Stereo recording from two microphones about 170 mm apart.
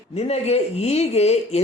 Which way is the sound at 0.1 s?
40° left (ahead or behind).